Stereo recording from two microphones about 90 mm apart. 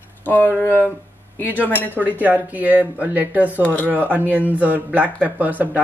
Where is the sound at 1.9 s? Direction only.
20° right (ahead or behind).